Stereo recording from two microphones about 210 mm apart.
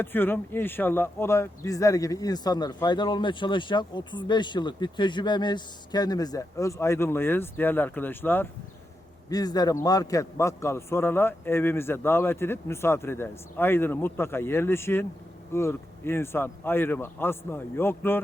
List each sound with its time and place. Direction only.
0.0 s speech: 10° left (ahead or behind)